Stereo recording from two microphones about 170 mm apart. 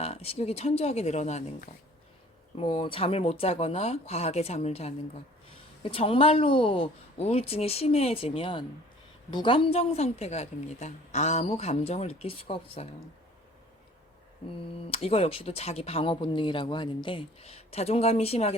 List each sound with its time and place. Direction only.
0.0 s speech: 35° left (ahead or behind)
2.6 s speech: 30° left (ahead or behind)
14.4 s speech: 35° left (ahead or behind)